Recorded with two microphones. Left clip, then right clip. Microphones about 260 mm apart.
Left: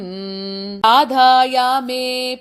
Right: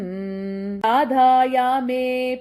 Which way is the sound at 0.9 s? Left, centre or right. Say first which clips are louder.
Left 4 dB; left.